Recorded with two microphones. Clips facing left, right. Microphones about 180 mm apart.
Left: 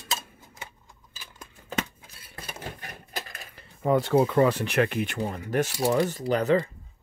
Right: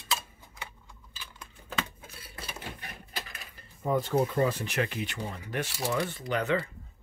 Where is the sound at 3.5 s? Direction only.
80° left; by 6.6 s 35° left (ahead or behind).